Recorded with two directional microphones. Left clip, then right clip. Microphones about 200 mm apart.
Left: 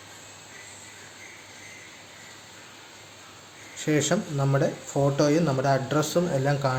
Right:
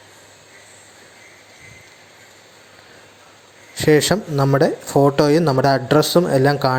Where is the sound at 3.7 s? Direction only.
40° right (ahead or behind).